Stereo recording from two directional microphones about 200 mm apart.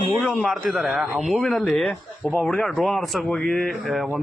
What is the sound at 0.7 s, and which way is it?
Speech, centre (ahead or behind).